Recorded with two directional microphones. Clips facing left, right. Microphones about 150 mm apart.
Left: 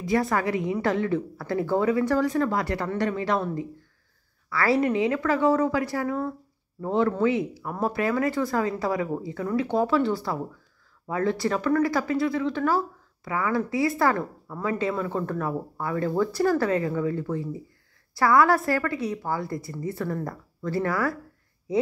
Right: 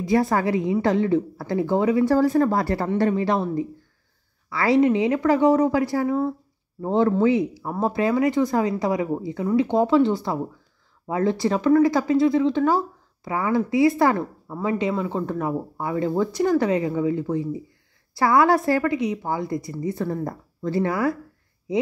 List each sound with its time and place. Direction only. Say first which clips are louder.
0.1 s speech: right 4 dB; 25° right (ahead or behind)
2.1 s speech: right 5 dB; 35° right (ahead or behind)
4.5 s speech: right 4 dB; 20° right (ahead or behind)